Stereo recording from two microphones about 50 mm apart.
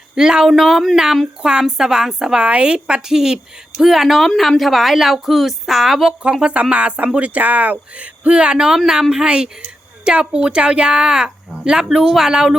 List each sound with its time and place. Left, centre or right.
0.2 s a woman's voice: centre
6.4 s speech: right